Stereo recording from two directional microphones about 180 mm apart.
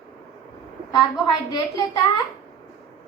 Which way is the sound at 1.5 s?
20° left (ahead or behind).